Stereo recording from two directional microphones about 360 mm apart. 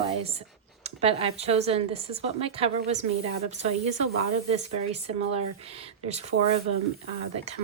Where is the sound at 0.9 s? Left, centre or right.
Centre.